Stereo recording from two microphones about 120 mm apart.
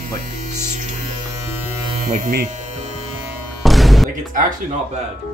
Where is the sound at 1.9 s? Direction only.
90° right.